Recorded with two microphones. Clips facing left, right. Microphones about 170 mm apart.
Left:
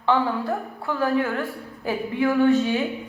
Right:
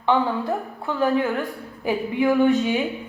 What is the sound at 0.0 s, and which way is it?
A woman's voice, 15° right (ahead or behind).